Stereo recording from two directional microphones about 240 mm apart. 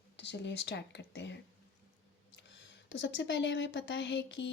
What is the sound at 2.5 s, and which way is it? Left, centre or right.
A woman's voice, left.